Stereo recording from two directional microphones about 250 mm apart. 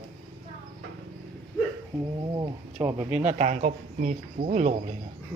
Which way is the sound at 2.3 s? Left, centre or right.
Centre.